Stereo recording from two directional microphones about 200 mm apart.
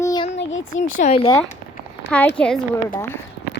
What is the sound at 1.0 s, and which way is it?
Speech, 30° left (ahead or behind).